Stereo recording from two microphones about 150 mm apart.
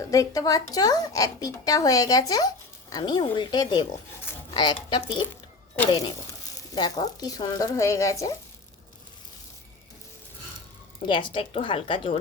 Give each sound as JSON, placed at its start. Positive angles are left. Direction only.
{"t": 0.1, "sound": "a woman's voice", "side_deg": 25}
{"t": 11.0, "sound": "speech", "side_deg": 30}